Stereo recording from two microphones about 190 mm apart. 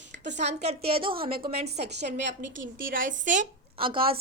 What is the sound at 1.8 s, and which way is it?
Speech, 65° right (ahead or behind).